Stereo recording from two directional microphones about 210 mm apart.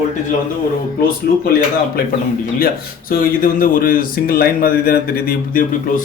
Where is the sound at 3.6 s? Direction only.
45° left (ahead or behind).